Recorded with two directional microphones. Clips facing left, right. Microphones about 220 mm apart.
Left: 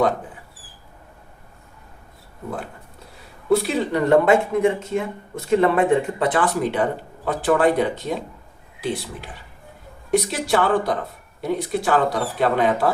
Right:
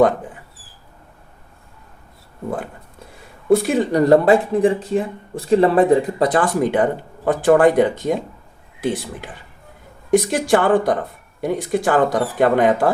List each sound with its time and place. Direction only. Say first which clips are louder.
3.5 s speech: right 4 dB; 50° right (ahead or behind)
10.2 s speech: right 4 dB; 50° right (ahead or behind)